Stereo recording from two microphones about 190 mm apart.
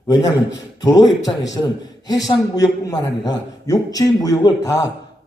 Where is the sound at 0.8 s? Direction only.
20° left (ahead or behind).